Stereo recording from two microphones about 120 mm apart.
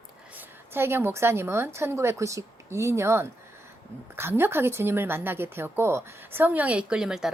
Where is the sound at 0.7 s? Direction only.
20° right (ahead or behind).